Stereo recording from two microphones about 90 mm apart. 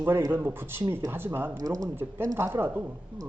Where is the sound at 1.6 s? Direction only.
45° right (ahead or behind).